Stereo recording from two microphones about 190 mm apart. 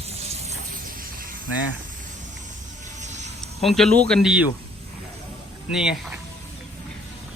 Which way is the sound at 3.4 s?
Centre (ahead or behind).